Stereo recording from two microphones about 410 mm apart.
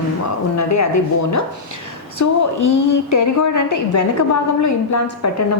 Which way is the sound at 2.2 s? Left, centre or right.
Left.